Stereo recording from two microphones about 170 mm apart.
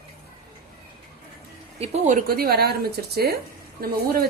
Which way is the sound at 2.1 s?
60° right (ahead or behind).